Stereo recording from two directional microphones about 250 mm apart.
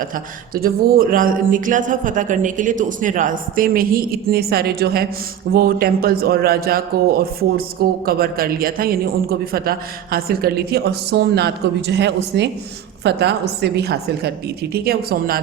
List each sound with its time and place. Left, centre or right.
0.5 s speech: right